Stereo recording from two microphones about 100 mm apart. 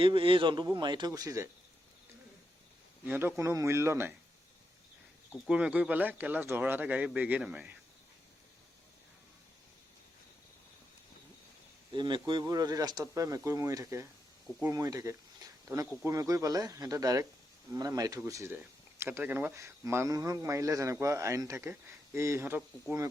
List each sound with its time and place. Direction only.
0.0 s speech: 60° right (ahead or behind); by 1.5 s 35° right (ahead or behind)
3.0 s a man's voice: 20° right (ahead or behind)
5.5 s speech: 10° right (ahead or behind)
11.9 s speech: 50° right (ahead or behind); by 18.5 s 30° right (ahead or behind)
18.5 s a man's voice: 20° right (ahead or behind)